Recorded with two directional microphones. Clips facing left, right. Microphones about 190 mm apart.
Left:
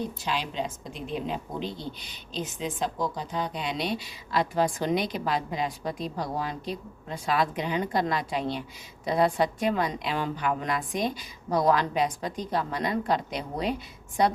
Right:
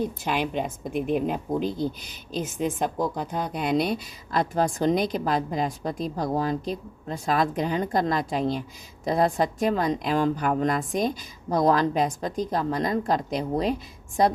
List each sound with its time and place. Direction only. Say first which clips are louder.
0.3 s a woman's voice: right 3 dB; 55° right (ahead or behind)
1.6 s speech: right 7 dB; 5° right (ahead or behind)
2.4 s a woman's voice: right 4 dB; 50° right (ahead or behind)